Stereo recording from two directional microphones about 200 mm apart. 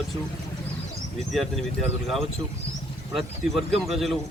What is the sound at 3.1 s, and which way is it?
Speech, centre (ahead or behind).